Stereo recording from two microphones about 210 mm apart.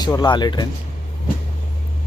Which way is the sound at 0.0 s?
20° left (ahead or behind).